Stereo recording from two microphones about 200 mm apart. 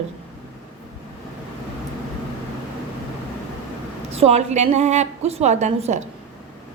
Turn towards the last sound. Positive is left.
turn(degrees=-35)  # may be behind; listen again after turning